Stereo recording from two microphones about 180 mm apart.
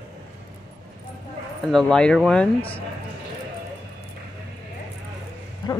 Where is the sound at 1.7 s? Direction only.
5° left (ahead or behind).